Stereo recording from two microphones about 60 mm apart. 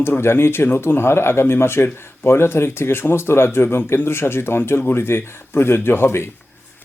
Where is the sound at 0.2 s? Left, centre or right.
Left.